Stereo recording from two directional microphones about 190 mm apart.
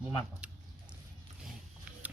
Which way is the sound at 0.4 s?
10° right (ahead or behind).